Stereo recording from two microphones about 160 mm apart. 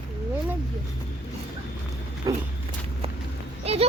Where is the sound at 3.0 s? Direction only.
40° right (ahead or behind).